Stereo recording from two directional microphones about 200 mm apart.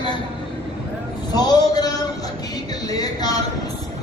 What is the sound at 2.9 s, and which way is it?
Speech, 20° left (ahead or behind).